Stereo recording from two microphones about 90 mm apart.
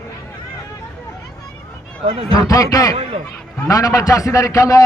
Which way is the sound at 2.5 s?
40° left (ahead or behind).